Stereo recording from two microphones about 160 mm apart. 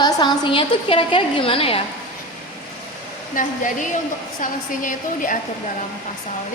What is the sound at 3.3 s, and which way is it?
A woman's voice, 55° left (ahead or behind).